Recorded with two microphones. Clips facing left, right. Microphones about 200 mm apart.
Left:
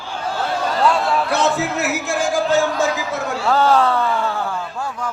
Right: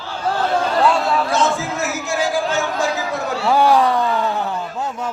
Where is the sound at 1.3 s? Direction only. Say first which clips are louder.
Left 1 dB; 65° left (ahead or behind).